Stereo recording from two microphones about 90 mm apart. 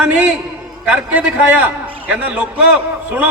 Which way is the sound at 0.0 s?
10° right (ahead or behind).